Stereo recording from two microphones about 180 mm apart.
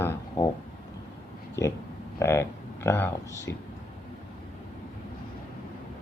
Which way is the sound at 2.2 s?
15° left (ahead or behind).